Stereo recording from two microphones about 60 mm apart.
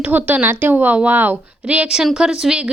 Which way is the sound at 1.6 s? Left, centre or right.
Centre.